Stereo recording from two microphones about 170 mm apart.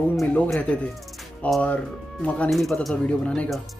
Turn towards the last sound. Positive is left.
turn(degrees=5)  # may be behind; listen again after turning